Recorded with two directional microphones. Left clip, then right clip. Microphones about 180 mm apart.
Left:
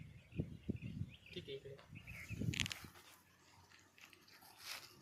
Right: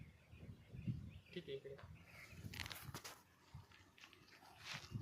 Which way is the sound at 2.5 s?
25° right (ahead or behind).